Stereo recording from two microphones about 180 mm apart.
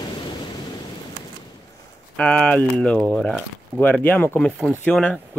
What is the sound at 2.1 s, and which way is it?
Speech, 5° left (ahead or behind).